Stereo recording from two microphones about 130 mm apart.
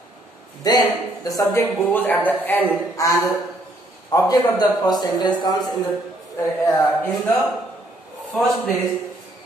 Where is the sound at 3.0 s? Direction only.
25° left (ahead or behind).